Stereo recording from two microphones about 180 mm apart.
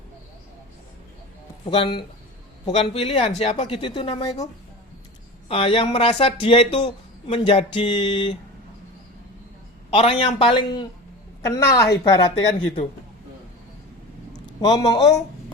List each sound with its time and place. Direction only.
1.6 s speech: 30° left (ahead or behind)
5.5 s speech: 30° left (ahead or behind)
9.9 s speech: 30° left (ahead or behind)
12.5 s speech: 35° left (ahead or behind)
14.4 s a man's voice: 20° left (ahead or behind)